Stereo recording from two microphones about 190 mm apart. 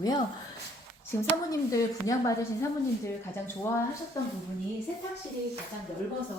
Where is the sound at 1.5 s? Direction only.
15° left (ahead or behind).